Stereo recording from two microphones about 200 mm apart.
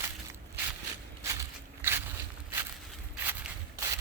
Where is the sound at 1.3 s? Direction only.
15° right (ahead or behind).